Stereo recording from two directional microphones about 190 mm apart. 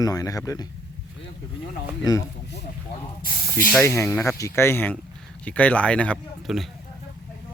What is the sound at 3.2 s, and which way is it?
Spray, 50° left (ahead or behind).